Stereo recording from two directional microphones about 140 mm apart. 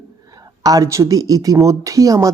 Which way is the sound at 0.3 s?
25° right (ahead or behind).